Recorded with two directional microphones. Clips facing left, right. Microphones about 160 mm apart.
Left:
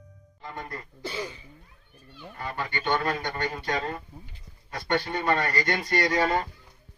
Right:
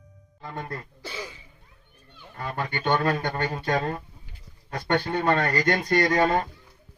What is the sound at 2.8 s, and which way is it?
A man's voice, 55° right (ahead or behind).